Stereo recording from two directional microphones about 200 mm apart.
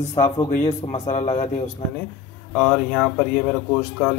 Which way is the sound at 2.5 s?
5° left (ahead or behind).